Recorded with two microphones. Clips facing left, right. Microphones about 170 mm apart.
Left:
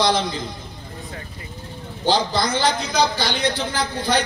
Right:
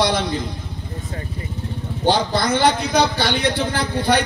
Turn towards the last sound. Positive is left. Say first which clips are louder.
# right 3 dB
turn(degrees=-60)  # may be behind; listen again after turning